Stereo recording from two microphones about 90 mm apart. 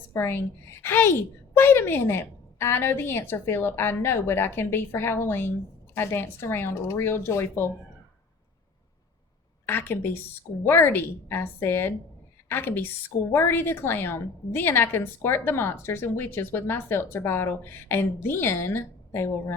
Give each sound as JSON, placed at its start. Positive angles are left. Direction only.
{"t": 0.1, "sound": "a woman's voice", "side_deg": 25}
{"t": 9.6, "sound": "a woman's voice", "side_deg": 25}